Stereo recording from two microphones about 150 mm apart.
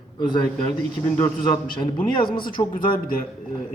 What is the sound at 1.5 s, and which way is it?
A woman's voice, 30° left (ahead or behind).